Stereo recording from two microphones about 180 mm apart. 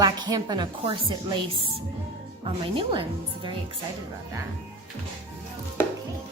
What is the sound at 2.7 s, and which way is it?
Speech, 30° right (ahead or behind).